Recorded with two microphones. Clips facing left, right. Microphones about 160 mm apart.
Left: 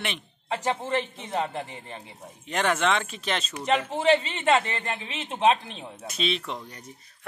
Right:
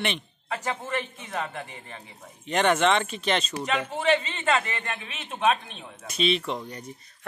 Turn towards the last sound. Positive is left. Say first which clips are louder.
# right 4 dB
turn(degrees=0)  # may be behind; listen again after turning